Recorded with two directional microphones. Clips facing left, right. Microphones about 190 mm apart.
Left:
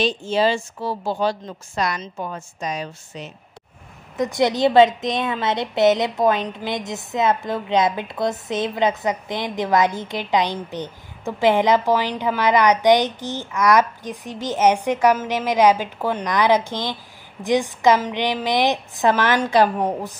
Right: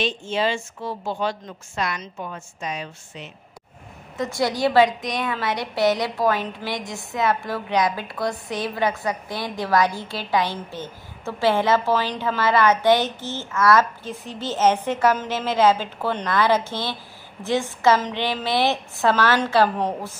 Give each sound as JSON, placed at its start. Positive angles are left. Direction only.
{"t": 0.0, "sound": "a woman's voice", "side_deg": 35}
{"t": 4.2, "sound": "a woman's voice", "side_deg": 20}